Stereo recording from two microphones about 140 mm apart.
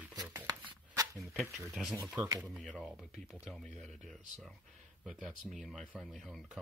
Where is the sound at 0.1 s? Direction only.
25° right (ahead or behind).